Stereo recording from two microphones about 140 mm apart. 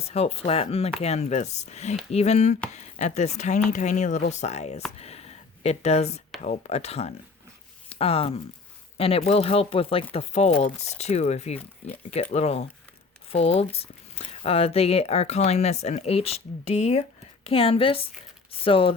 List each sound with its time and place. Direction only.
0.0 s a woman's voice: 45° left (ahead or behind)